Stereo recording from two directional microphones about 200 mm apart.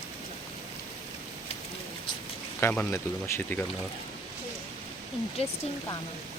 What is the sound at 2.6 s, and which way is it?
Speech, 10° left (ahead or behind).